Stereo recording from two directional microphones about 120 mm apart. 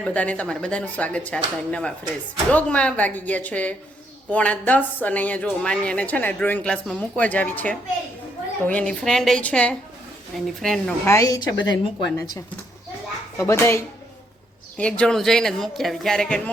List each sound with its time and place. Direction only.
0.0 s speech: 10° left (ahead or behind)
11.0 s speech: 25° left (ahead or behind)
14.8 s speech: 10° left (ahead or behind)